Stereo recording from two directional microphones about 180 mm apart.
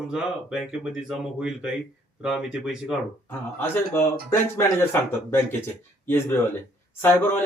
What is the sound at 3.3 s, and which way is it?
Speech, 10° left (ahead or behind).